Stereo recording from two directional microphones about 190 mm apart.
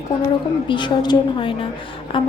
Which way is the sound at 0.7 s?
25° left (ahead or behind).